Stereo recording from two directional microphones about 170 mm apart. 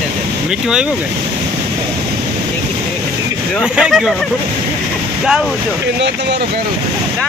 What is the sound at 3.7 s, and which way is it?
Speech, 5° right (ahead or behind).